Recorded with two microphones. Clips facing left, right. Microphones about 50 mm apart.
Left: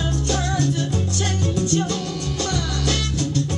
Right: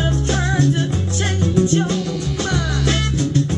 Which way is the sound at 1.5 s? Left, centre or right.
Right.